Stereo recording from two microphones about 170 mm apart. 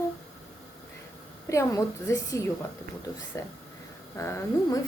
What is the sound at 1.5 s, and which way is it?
A woman's voice, 20° left (ahead or behind).